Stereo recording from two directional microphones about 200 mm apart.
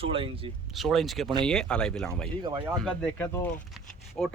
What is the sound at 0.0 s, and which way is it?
Speech, 25° right (ahead or behind).